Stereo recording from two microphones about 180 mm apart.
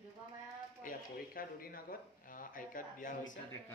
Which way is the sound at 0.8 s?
55° left (ahead or behind).